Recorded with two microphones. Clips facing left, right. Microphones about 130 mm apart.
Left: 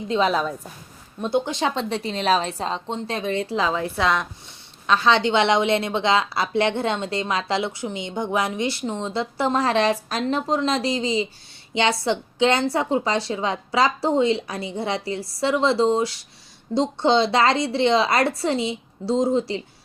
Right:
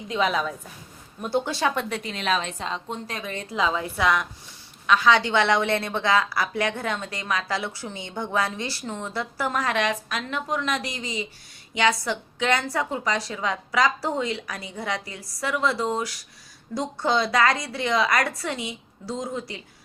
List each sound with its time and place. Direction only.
0.1 s a woman's voice: 35° left (ahead or behind)
1.2 s a woman's voice: 20° left (ahead or behind)